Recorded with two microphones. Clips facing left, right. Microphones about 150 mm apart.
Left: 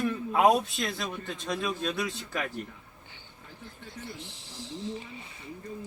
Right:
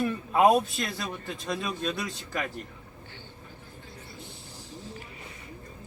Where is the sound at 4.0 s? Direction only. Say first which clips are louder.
Left 3 dB; 85° left.